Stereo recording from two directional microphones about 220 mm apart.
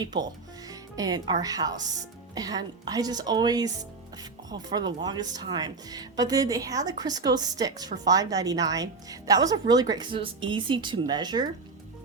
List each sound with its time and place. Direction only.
0.0 s speech: 20° right (ahead or behind)